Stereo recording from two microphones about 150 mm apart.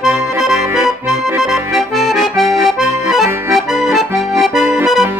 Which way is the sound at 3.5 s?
Centre (ahead or behind).